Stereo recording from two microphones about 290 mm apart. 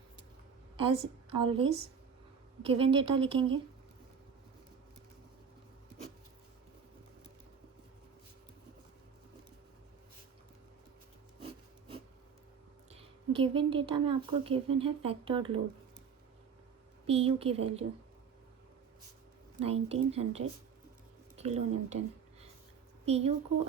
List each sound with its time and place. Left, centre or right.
1.5 s a woman's voice: centre
12.9 s a woman's voice: centre
17.1 s a woman's voice: centre
19.5 s a woman's voice: right